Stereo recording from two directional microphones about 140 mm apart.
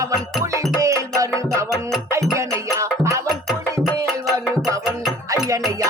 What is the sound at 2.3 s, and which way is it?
Music, 20° right (ahead or behind).